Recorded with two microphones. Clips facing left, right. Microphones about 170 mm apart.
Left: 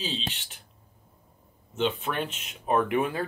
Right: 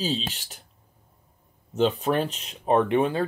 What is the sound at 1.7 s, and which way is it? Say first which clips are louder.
Speech: right 6 dB; 40° right (ahead or behind).